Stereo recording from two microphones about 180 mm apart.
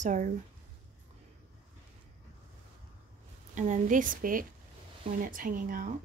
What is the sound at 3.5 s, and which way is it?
A woman's voice, 40° right (ahead or behind).